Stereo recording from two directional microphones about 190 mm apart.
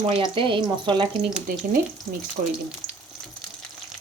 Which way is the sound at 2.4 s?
45° right (ahead or behind).